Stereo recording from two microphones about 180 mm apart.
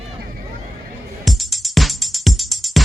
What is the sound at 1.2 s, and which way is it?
Music, centre (ahead or behind).